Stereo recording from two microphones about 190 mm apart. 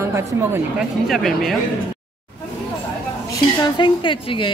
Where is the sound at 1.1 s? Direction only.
Centre (ahead or behind).